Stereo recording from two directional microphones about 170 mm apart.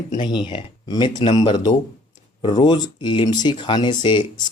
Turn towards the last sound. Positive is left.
turn(degrees=25)  # may be behind; listen again after turning